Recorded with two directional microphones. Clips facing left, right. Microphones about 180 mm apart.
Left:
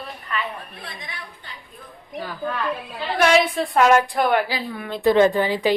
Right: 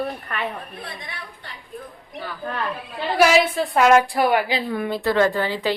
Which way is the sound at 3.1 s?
5° right (ahead or behind).